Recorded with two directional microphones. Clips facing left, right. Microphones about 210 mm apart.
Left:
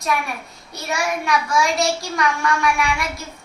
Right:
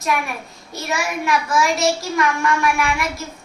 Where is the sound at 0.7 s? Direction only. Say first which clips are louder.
Even; centre (ahead or behind).